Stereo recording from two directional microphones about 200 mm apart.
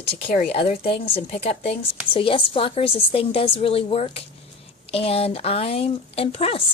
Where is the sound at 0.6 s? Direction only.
30° left (ahead or behind).